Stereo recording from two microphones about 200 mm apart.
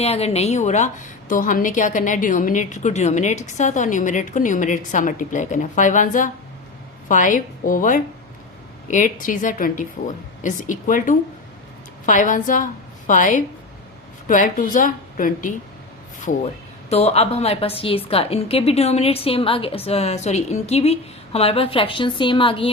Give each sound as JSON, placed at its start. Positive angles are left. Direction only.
{"t": 0.0, "sound": "a woman's voice", "side_deg": 30}
{"t": 16.9, "sound": "a woman's voice", "side_deg": 30}